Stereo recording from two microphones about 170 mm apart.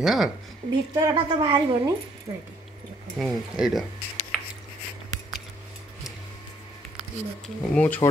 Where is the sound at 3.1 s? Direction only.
Centre (ahead or behind).